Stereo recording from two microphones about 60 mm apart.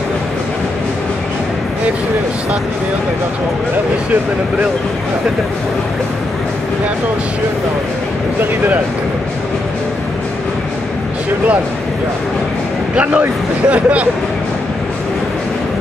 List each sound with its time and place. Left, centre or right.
12.9 s speech: right